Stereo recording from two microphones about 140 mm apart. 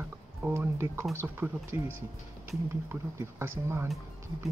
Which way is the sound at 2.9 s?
15° right (ahead or behind).